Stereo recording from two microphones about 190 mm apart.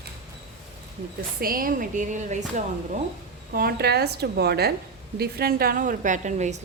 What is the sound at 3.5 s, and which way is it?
A woman's voice, 55° right (ahead or behind).